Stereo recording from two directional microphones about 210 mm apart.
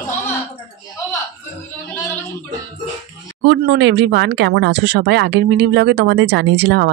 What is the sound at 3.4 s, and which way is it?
Speech, 50° right (ahead or behind).